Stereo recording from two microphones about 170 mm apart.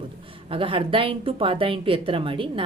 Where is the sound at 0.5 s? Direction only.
30° right (ahead or behind).